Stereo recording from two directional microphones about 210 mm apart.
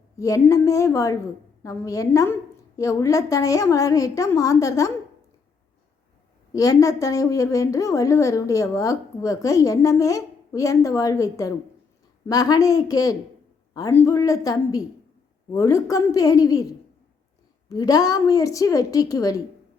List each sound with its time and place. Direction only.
0.2 s a woman's voice: 15° left (ahead or behind)
6.5 s a woman's voice: 15° left (ahead or behind)